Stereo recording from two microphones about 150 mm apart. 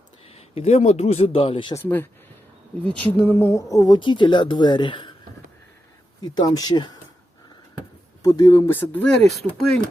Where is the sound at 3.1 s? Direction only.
10° left (ahead or behind); by 5.1 s 35° left (ahead or behind).